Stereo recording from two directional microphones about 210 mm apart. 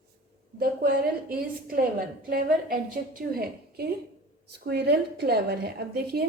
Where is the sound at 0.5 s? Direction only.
45° right (ahead or behind).